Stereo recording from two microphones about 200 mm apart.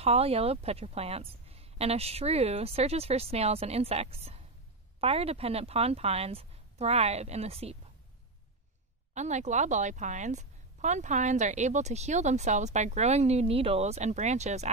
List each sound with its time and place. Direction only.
0.0 s a woman's voice: 30° right (ahead or behind)
9.1 s a woman's voice: 35° right (ahead or behind)